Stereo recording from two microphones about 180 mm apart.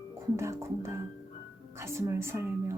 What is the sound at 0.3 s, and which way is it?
Speech, 15° right (ahead or behind).